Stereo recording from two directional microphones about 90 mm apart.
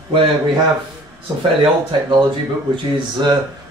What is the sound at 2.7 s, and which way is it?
Speech, 55° right (ahead or behind).